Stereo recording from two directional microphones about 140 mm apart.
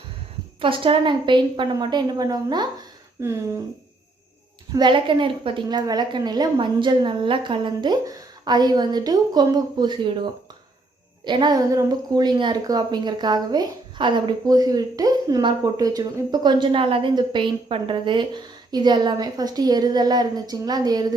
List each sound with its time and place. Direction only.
0.6 s a woman's voice: 40° right (ahead or behind); by 3.3 s 20° right (ahead or behind)
4.7 s a woman's voice: 35° right (ahead or behind)
11.3 s a woman's voice: 30° right (ahead or behind)